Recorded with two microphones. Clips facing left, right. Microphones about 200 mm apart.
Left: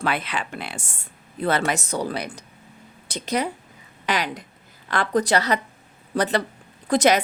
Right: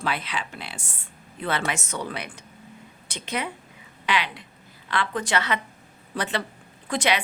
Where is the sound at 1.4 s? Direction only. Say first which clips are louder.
Left 5 dB; 40° left (ahead or behind).